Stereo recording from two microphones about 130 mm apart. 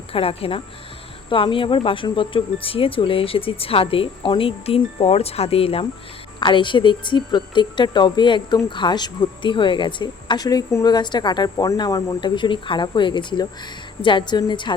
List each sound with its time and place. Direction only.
0.1 s speech: 45° left (ahead or behind)
6.4 s speech: 40° left (ahead or behind)